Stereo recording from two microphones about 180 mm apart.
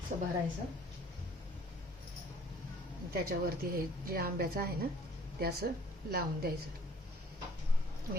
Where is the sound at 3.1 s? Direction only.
55° right (ahead or behind).